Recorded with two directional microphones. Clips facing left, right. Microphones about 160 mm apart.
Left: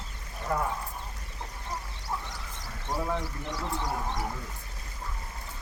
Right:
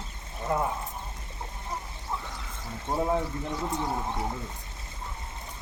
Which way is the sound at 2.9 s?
25° right (ahead or behind).